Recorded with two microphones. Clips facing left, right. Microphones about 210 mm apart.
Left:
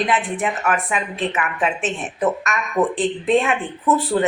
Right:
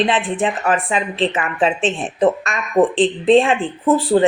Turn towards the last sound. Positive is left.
turn(degrees=-30)  # may be behind; listen again after turning